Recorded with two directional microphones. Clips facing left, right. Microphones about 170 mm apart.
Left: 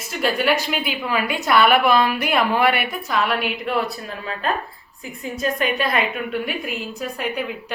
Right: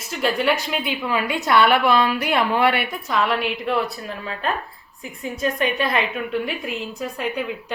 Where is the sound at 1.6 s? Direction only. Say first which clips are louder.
Left 1 dB; 15° left (ahead or behind).